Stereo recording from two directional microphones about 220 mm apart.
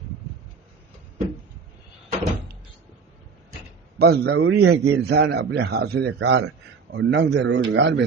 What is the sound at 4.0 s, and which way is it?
A man's voice, 45° right (ahead or behind).